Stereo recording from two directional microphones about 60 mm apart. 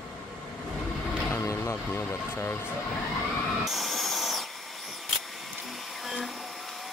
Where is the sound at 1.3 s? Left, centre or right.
Left.